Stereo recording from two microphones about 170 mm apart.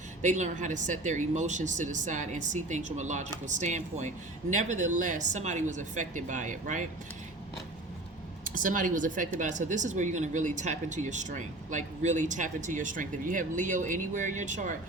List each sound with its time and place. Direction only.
0.2 s speech: 45° right (ahead or behind)
8.4 s speech: 50° right (ahead or behind)